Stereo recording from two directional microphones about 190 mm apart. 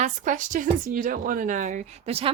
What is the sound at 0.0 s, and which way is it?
Speech, 40° right (ahead or behind).